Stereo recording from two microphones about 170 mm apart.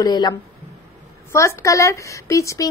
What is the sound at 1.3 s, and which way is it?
A woman's voice, 20° left (ahead or behind).